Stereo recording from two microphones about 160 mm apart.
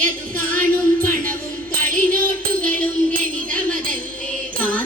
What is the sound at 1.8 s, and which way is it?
Music, 60° right (ahead or behind).